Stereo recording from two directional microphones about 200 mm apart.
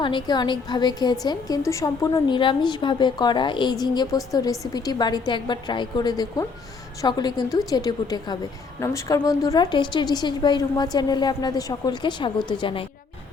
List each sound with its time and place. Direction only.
0.0 s a woman's voice: 25° left (ahead or behind)